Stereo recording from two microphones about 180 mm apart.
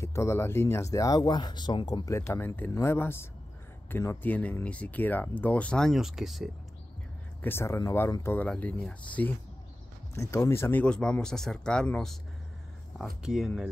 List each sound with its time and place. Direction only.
0.0 s speech: 15° left (ahead or behind); by 6.5 s centre (ahead or behind)
7.4 s speech: 15° left (ahead or behind); by 13.5 s 5° right (ahead or behind)